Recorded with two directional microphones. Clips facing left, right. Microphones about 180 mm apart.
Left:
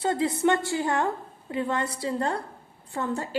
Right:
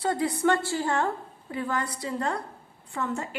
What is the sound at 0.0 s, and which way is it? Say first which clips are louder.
A woman's voice: left 1 dB; 25° left (ahead or behind).